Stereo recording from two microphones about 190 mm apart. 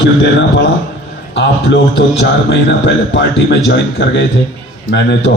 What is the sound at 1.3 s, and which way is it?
A man's voice, 65° left (ahead or behind).